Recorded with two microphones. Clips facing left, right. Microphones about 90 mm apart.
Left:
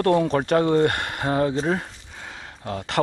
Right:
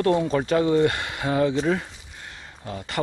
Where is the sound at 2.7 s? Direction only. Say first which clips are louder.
Left 4 dB; 65° left (ahead or behind).